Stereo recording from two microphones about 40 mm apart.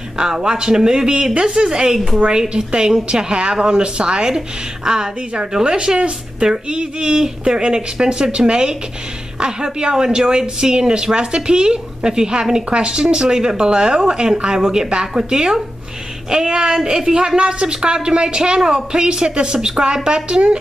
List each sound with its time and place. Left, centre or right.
0.2 s a man's voice: centre